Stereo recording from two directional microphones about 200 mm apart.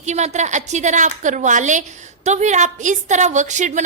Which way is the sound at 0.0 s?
35° right (ahead or behind).